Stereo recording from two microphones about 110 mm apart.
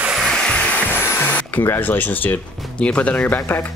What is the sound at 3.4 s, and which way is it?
Speech, 25° left (ahead or behind).